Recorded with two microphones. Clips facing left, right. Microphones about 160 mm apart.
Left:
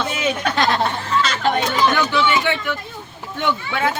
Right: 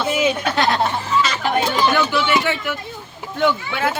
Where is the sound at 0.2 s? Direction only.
5° right (ahead or behind).